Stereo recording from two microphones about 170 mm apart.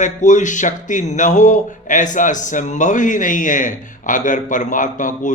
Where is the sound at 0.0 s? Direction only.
45° left (ahead or behind).